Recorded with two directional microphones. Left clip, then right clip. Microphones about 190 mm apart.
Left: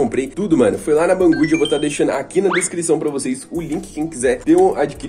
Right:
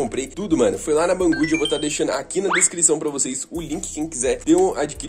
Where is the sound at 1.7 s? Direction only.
30° right (ahead or behind).